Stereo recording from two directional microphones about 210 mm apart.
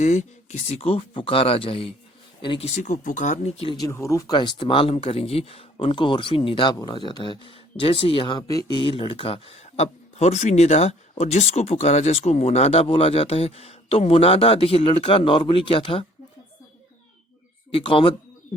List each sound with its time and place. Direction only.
0.0 s speech: 35° left (ahead or behind)
3.8 s speech: 15° left (ahead or behind)
17.7 s speech: 25° left (ahead or behind)